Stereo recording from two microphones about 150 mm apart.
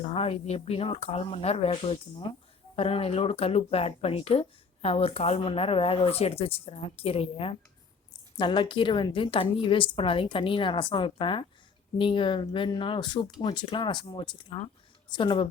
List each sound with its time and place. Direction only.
0.0 s speech: 40° left (ahead or behind)